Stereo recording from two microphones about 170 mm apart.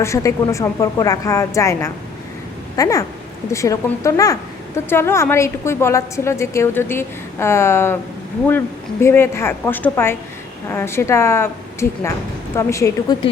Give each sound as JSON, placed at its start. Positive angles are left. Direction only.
{"t": 0.0, "sound": "a woman's voice", "side_deg": 15}